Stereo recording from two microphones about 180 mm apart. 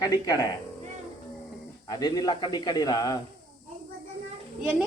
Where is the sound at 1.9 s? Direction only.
20° left (ahead or behind).